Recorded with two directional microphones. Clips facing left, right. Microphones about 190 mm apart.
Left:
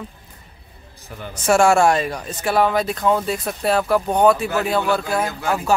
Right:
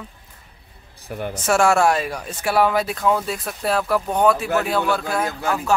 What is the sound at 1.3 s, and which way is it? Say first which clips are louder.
A man's voice: left 3 dB; centre (ahead or behind).